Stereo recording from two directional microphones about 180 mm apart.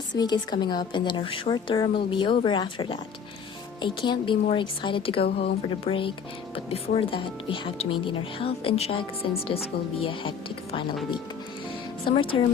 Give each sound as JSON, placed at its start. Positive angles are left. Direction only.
{"t": 0.2, "sound": "a woman's voice", "side_deg": 25}
{"t": 5.2, "sound": "speech", "side_deg": 60}
{"t": 5.6, "sound": "a woman's voice", "side_deg": 30}
{"t": 12.0, "sound": "a woman's voice", "side_deg": 30}